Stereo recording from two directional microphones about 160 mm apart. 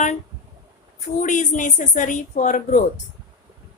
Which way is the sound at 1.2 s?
50° left (ahead or behind).